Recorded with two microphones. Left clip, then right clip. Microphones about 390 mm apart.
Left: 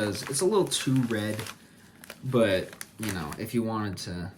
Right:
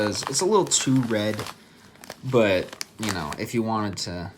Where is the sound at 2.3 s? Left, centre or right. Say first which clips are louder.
Right 4 dB; centre.